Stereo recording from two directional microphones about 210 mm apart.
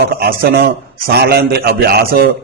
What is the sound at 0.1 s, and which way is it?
A man's voice, 45° right (ahead or behind).